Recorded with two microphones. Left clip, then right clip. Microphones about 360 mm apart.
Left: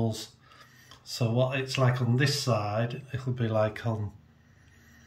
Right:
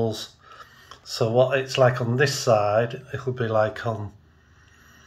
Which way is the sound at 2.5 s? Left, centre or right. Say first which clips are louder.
Right 10 dB; centre.